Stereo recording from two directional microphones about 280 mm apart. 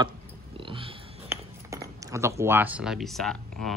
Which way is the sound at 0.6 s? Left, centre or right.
Centre.